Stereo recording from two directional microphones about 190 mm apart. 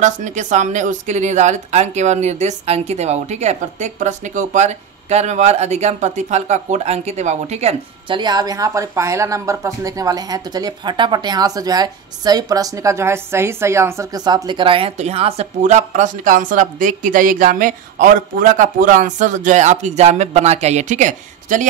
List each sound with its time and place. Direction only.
0.0 s speech: 40° right (ahead or behind)
8.2 s speech: 20° right (ahead or behind); by 21.6 s 40° right (ahead or behind)